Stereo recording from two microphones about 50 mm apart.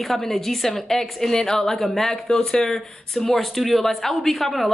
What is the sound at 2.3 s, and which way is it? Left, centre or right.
Speech, centre.